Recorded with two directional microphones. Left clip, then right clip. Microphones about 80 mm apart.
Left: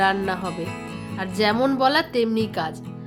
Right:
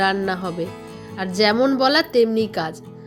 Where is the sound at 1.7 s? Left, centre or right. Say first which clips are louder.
Right 3 dB; right.